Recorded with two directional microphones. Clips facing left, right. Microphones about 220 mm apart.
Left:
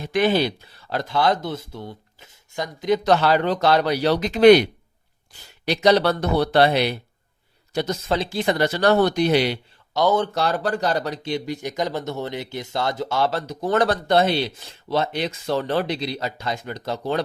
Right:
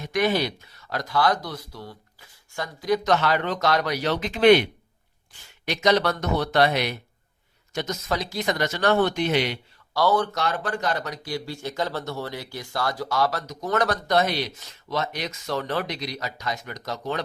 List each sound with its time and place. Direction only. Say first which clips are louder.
0.0 s speech: left 4 dB; 30° left (ahead or behind)
9.9 s speech: left 2 dB; 20° left (ahead or behind)
10.3 s speech: left 4 dB; 35° left (ahead or behind)